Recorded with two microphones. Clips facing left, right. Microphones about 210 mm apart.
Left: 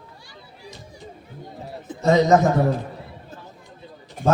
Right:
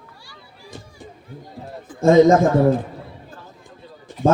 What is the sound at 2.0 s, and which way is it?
Speech, 50° right (ahead or behind).